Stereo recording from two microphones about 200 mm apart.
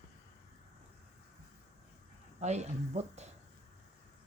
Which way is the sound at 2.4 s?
35° right (ahead or behind).